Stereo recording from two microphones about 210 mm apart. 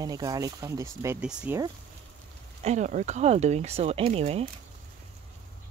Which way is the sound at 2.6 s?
35° right (ahead or behind).